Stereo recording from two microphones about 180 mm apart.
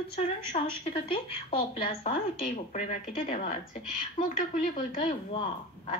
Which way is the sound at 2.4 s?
45° left (ahead or behind).